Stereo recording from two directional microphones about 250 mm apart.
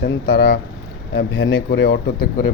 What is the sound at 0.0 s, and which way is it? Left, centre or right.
Speech, left.